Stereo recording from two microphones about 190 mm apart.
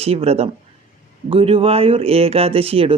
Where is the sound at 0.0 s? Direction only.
30° right (ahead or behind).